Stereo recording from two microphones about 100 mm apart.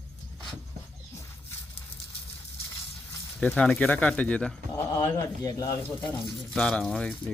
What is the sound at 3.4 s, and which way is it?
Speech, 10° left (ahead or behind).